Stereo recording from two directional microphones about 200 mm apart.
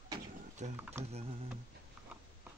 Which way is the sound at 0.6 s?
35° right (ahead or behind).